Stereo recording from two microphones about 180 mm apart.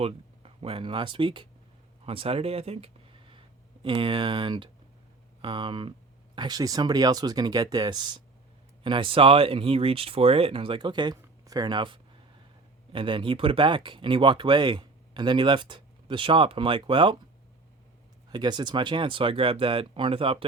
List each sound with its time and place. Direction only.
0.0 s speech: 35° right (ahead or behind)
18.3 s speech: 25° right (ahead or behind)